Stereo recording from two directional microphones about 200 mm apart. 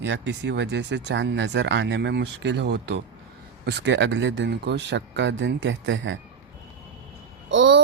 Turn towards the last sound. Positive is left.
turn(degrees=-65)  # may be behind; listen again after turning